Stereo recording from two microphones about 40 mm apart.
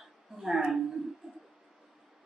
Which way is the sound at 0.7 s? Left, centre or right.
Centre.